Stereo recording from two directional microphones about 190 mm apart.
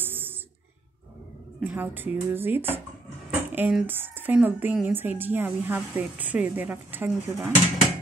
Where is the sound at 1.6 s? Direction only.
10° right (ahead or behind).